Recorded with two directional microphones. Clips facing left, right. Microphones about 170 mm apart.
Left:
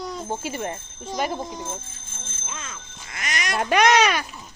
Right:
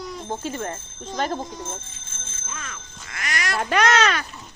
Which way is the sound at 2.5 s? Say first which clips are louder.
Right 2 dB; 25° left (ahead or behind).